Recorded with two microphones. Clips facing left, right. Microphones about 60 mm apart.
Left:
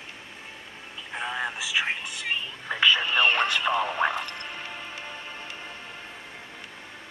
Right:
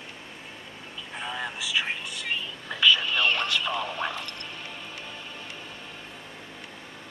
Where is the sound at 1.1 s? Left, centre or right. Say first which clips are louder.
Left 3 dB; centre.